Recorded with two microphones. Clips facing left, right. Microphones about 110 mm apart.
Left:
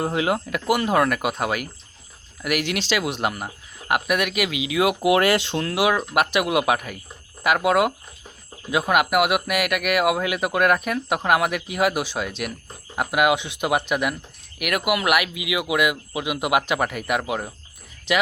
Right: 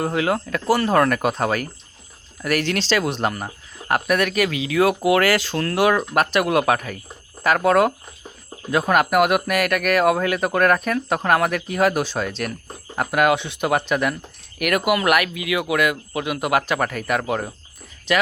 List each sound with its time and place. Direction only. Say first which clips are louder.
0.0 s speech: right 1 dB; 20° left (ahead or behind)
5.6 s speech: right 5 dB; 10° left (ahead or behind)